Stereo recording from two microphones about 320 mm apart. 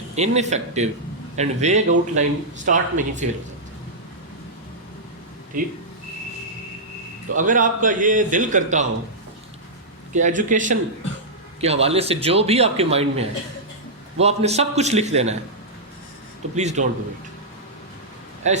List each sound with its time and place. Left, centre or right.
0.2 s a man's voice: right
5.5 s a man's voice: right
7.3 s a man's voice: right
10.1 s a man's voice: right
16.6 s a man's voice: right
18.4 s a man's voice: right